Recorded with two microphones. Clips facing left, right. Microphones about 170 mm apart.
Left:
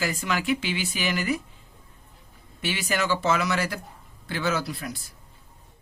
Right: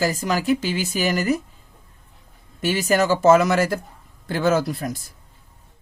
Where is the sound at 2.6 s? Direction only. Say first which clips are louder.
Right 8 dB; 45° right (ahead or behind).